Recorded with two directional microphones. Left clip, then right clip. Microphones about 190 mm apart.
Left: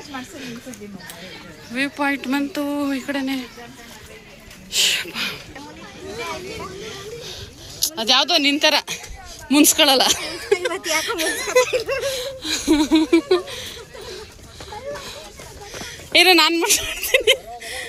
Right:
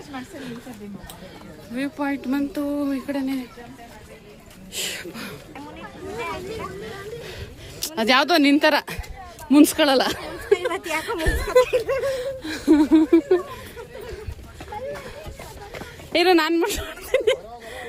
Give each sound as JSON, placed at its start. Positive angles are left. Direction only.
{"t": 1.7, "sound": "speech", "side_deg": 0}
{"t": 4.7, "sound": "speech", "side_deg": -15}
{"t": 7.9, "sound": "speech", "side_deg": -50}
{"t": 8.5, "sound": "a woman's voice", "side_deg": -35}
{"t": 9.5, "sound": "laughter", "side_deg": -25}
{"t": 10.7, "sound": "speech", "side_deg": -5}
{"t": 11.2, "sound": "laughter", "side_deg": -25}
{"t": 11.6, "sound": "speech", "side_deg": 0}
{"t": 12.1, "sound": "laughter", "side_deg": -20}
{"t": 15.8, "sound": "speech", "side_deg": -20}